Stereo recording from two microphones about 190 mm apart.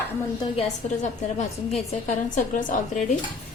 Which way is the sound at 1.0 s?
35° left (ahead or behind).